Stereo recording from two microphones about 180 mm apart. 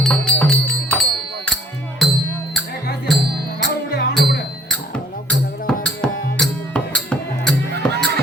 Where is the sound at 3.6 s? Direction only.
65° left (ahead or behind).